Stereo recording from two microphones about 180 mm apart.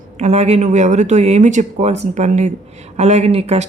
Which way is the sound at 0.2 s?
35° right (ahead or behind).